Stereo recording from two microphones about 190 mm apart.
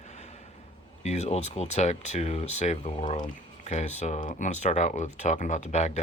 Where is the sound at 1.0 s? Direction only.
35° left (ahead or behind).